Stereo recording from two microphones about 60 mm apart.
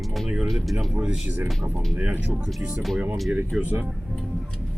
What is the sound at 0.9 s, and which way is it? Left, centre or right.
Speech, right.